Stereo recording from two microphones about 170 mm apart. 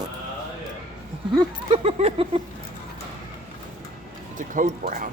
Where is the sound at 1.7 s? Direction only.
35° right (ahead or behind).